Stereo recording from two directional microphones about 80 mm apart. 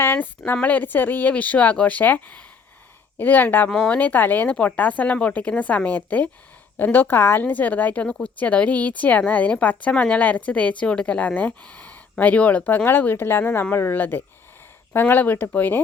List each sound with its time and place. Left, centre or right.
0.0 s a woman's voice: left
3.7 s speech: centre
3.9 s a woman's voice: left